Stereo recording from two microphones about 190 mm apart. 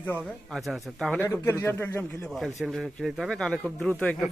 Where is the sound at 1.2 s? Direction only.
15° left (ahead or behind).